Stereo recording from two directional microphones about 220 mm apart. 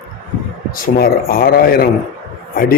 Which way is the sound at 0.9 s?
40° left (ahead or behind).